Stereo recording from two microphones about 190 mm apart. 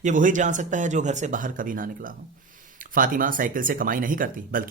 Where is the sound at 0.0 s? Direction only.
45° right (ahead or behind).